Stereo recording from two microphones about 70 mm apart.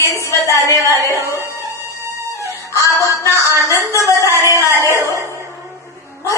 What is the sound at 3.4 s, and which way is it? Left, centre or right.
Speech, right.